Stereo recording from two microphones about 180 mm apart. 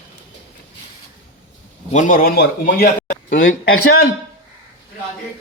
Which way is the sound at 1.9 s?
45° left (ahead or behind).